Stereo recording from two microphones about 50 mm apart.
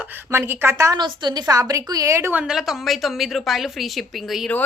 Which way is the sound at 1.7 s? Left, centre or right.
Right.